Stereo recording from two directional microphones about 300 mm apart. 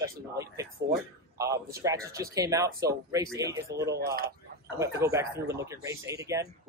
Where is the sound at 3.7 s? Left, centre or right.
Right.